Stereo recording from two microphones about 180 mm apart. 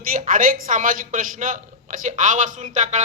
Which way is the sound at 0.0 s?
50° right (ahead or behind).